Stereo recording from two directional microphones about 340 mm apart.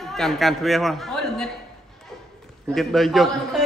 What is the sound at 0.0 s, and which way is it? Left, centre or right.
A man's voice, centre.